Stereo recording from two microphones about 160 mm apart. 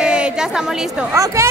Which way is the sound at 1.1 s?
20° right (ahead or behind).